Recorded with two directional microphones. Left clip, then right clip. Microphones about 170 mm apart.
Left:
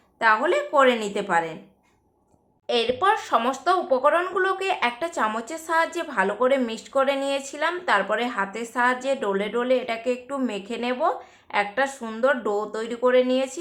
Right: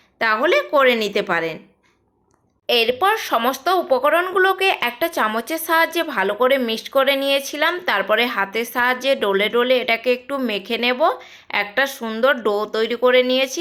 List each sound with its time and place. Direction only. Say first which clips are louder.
0.4 s speech: right 4 dB; 25° right (ahead or behind)
2.6 s speech: right 4 dB; 25° right (ahead or behind)